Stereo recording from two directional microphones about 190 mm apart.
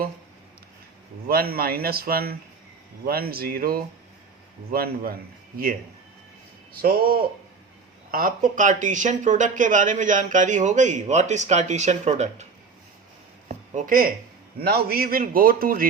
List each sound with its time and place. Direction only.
1.3 s a man's voice: 50° right (ahead or behind)
6.8 s a man's voice: 50° right (ahead or behind)
13.7 s a man's voice: 50° right (ahead or behind)